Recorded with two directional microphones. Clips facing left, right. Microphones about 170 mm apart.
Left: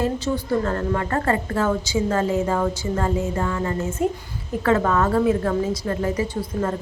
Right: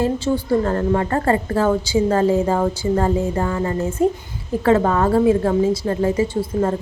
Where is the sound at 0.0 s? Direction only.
30° right (ahead or behind).